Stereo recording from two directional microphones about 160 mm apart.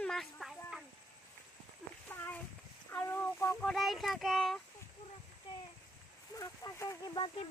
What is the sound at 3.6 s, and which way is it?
Child singing, centre (ahead or behind).